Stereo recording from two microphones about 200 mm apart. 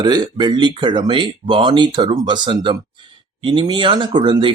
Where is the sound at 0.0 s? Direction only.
20° right (ahead or behind).